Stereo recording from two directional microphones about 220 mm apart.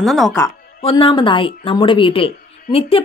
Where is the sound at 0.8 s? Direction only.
25° left (ahead or behind).